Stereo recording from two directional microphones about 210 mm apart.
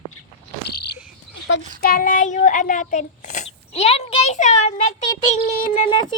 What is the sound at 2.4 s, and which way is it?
A child's voice, 35° left (ahead or behind).